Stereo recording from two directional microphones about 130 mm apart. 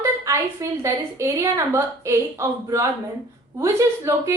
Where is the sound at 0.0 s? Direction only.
25° right (ahead or behind).